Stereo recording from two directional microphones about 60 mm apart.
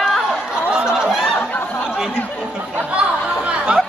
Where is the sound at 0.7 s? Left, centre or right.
Centre.